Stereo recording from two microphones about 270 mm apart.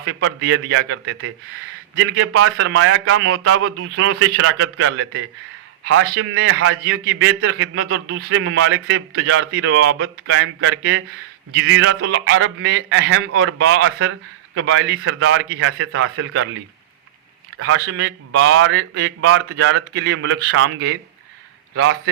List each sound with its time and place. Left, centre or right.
0.0 s a man's voice: right
17.6 s a man's voice: right